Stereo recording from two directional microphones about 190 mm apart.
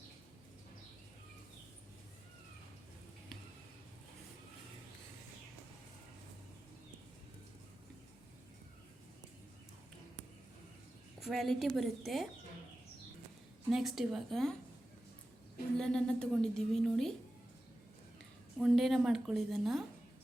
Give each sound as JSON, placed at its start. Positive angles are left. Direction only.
{"t": 11.2, "sound": "a woman's voice", "side_deg": 0}
{"t": 13.7, "sound": "a woman's voice", "side_deg": 0}
{"t": 15.8, "sound": "a woman's voice", "side_deg": 5}
{"t": 18.2, "sound": "speech", "side_deg": 0}